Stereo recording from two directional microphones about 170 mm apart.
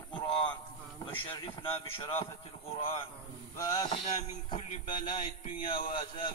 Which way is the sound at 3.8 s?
25° left (ahead or behind).